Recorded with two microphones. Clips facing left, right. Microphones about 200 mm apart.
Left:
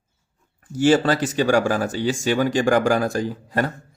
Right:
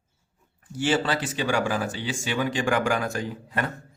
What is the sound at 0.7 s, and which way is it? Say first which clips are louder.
A man's voice: left 7 dB; 45° left (ahead or behind).